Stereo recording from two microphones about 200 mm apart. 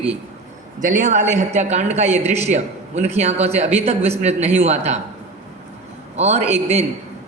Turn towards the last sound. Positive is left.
turn(degrees=-35)  # may be behind; listen again after turning